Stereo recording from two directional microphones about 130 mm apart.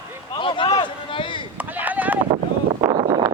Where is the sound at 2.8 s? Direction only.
35° right (ahead or behind).